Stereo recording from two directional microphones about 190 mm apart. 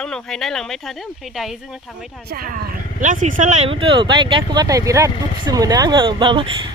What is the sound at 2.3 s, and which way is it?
Speech, 50° right (ahead or behind).